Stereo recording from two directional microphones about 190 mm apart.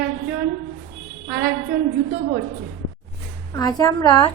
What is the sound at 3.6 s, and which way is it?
Speech, 20° left (ahead or behind).